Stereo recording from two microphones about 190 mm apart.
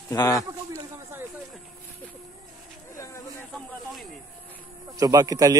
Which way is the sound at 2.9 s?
15° left (ahead or behind).